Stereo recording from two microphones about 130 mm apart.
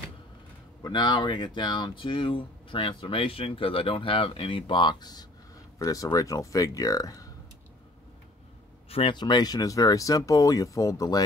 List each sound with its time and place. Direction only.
0.8 s speech: 35° left (ahead or behind)
8.8 s speech: 45° left (ahead or behind); by 11.2 s 30° left (ahead or behind)